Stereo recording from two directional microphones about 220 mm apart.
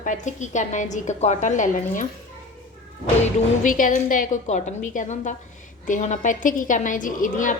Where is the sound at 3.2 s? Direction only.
35° left (ahead or behind).